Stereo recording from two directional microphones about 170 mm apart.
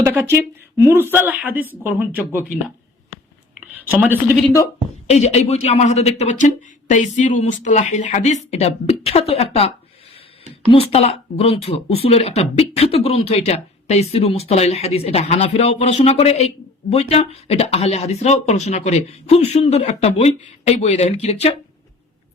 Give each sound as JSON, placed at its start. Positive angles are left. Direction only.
{"t": 0.0, "sound": "a woman's voice", "side_deg": -15}
{"t": 5.0, "sound": "speech", "side_deg": 40}